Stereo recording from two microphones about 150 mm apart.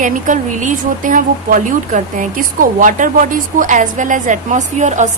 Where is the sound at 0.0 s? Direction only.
60° right (ahead or behind).